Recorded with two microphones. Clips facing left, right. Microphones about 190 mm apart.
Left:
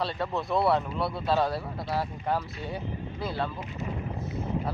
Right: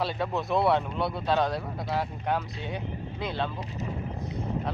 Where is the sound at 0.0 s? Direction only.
Centre (ahead or behind).